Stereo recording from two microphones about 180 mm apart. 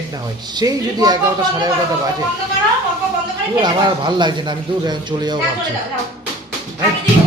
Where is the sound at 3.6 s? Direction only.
25° right (ahead or behind).